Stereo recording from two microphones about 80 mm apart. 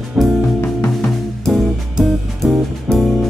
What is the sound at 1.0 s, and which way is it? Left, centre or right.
Music, centre.